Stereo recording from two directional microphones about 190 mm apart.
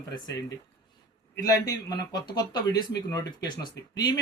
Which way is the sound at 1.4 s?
20° left (ahead or behind).